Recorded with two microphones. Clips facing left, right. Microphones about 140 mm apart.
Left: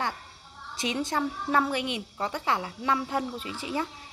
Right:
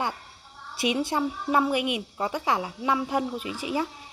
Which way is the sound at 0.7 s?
10° right (ahead or behind).